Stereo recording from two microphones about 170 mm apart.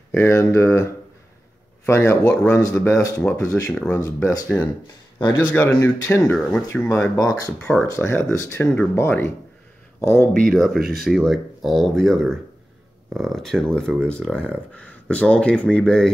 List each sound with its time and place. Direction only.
0.1 s speech: 15° left (ahead or behind)
1.9 s speech: 15° left (ahead or behind)
5.8 s speech: 15° left (ahead or behind)
6.3 s speech: 5° left (ahead or behind)
6.7 s speech: 15° left (ahead or behind)
7.5 s speech: 5° left (ahead or behind)
7.8 s speech: 15° left (ahead or behind)
10.5 s speech: centre (ahead or behind)